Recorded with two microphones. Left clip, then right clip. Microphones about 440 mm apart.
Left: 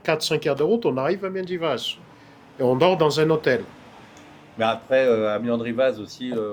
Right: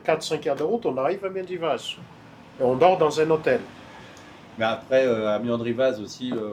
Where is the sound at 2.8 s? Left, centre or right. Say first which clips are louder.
Right 1 dB; left.